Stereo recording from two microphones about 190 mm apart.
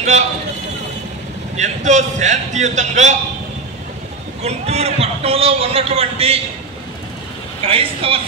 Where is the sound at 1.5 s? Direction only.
40° right (ahead or behind).